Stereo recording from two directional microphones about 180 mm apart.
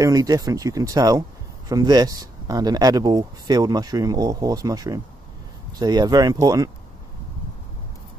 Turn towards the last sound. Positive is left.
turn(degrees=-20)  # may be behind; listen again after turning